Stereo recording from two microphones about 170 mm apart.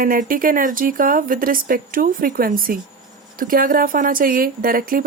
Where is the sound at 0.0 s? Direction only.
55° right (ahead or behind).